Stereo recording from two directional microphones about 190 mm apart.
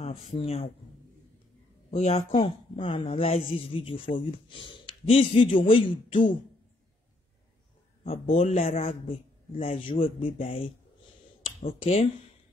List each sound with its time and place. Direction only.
0.0 s a man's voice: 35° left (ahead or behind)
1.9 s speech: 35° left (ahead or behind)
8.0 s a man's voice: 35° left (ahead or behind)